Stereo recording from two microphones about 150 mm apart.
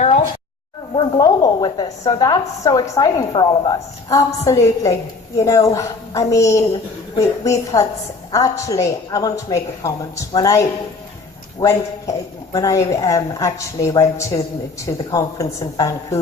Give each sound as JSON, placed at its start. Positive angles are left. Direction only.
{"t": 0.0, "sound": "a sound", "side_deg": 50}
{"t": 0.9, "sound": "a woman's voice", "side_deg": 30}
{"t": 12.5, "sound": "a woman's voice", "side_deg": 20}